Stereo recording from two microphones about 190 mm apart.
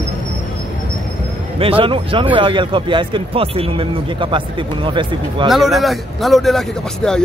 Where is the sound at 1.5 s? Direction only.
30° right (ahead or behind).